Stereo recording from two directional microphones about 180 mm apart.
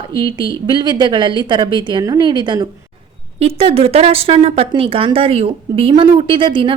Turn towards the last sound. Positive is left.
turn(degrees=-30)  # may be behind; listen again after turning